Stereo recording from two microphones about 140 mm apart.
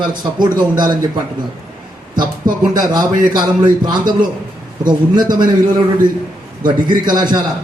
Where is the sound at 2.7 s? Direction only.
25° right (ahead or behind).